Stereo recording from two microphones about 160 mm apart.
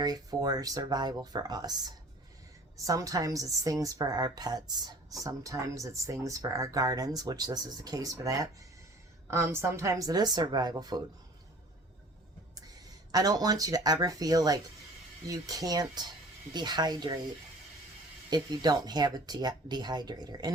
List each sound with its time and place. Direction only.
0.0 s a woman's voice: 25° right (ahead or behind)
13.1 s a woman's voice: 25° right (ahead or behind)
18.3 s a woman's voice: 25° right (ahead or behind)